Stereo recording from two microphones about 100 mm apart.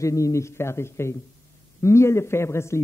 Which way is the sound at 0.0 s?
30° left (ahead or behind).